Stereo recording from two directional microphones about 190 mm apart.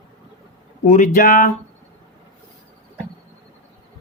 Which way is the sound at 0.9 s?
45° left (ahead or behind).